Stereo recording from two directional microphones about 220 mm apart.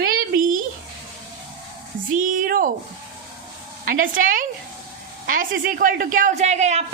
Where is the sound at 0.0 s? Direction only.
40° right (ahead or behind).